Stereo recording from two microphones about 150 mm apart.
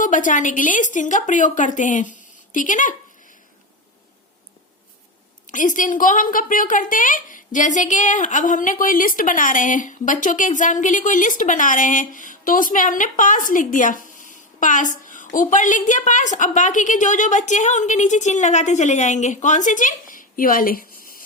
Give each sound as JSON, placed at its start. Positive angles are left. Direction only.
{"t": 0.0, "sound": "a woman's voice", "side_deg": 60}
{"t": 5.5, "sound": "a woman's voice", "side_deg": 60}